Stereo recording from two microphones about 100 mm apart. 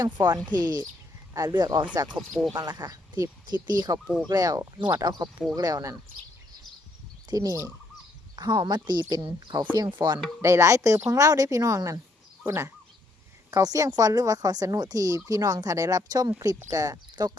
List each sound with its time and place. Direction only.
0.0 s a woman's voice: 40° right (ahead or behind)
2.1 s speech: centre (ahead or behind)
2.5 s a woman's voice: 40° right (ahead or behind)
7.3 s speech: 35° right (ahead or behind)
8.4 s a woman's voice: 45° right (ahead or behind)
10.4 s speech: 30° right (ahead or behind)
13.5 s speech: 35° right (ahead or behind)